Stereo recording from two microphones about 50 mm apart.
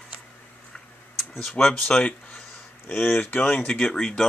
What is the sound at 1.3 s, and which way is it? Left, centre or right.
Speech, centre.